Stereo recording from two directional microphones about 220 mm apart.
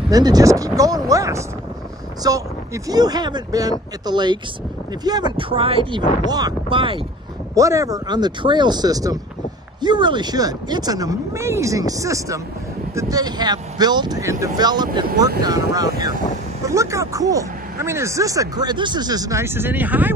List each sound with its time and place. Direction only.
0.1 s speech: 15° right (ahead or behind)